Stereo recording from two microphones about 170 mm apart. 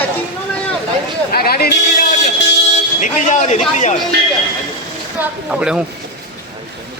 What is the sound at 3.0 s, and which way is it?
Speech, 45° left (ahead or behind).